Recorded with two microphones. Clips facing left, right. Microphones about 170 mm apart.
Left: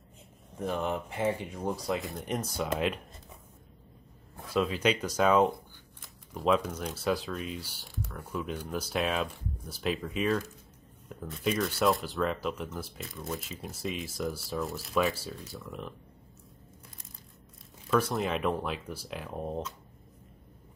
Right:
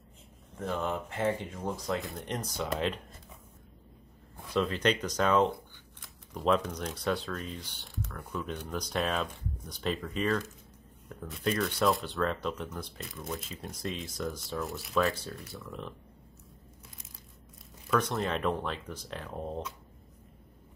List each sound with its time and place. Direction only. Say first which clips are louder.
0.6 s speech: left 1 dB; 15° left (ahead or behind)
2.0 s speech: left 2 dB; centre (ahead or behind)
4.6 s speech: left 1 dB; 10° left (ahead or behind)
17.8 s speech: left 2 dB; 5° left (ahead or behind)